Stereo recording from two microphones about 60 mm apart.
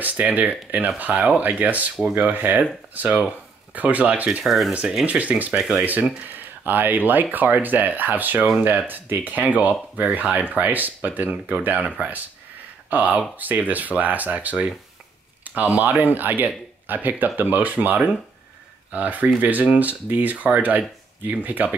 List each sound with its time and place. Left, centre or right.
0.0 s speech: right
4.4 s speech: centre
5.0 s speech: right
6.6 s speech: right
15.4 s a sound: right
15.8 s speech: right